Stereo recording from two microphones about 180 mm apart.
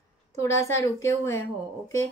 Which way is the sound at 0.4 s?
15° left (ahead or behind).